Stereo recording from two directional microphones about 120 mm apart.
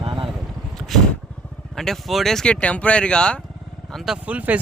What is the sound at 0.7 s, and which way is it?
Vehicle, centre (ahead or behind).